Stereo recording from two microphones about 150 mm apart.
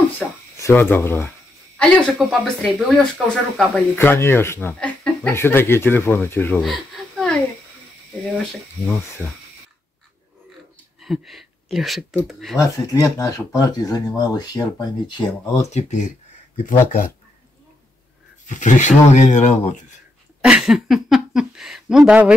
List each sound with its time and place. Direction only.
0.6 s speech: 15° left (ahead or behind)
6.6 s a sound: centre (ahead or behind)
11.0 s speech: centre (ahead or behind)
12.5 s speech: 20° left (ahead or behind)
15.7 s speech: 55° left (ahead or behind)
18.5 s speech: 55° left (ahead or behind)
20.4 s speech: 5° right (ahead or behind)